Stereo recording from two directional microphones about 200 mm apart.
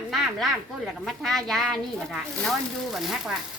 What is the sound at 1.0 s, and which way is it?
Speech, centre (ahead or behind).